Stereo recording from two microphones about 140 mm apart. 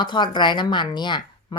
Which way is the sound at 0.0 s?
35° left (ahead or behind).